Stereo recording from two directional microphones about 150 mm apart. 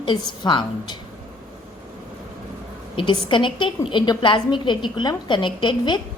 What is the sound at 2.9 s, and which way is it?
A woman's voice, 35° left (ahead or behind).